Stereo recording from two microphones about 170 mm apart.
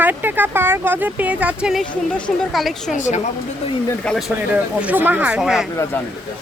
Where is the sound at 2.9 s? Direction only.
45° left (ahead or behind).